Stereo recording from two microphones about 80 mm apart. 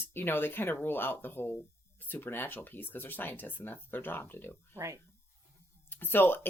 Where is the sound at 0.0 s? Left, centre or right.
Left.